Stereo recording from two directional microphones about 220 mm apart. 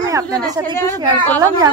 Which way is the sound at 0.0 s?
15° right (ahead or behind).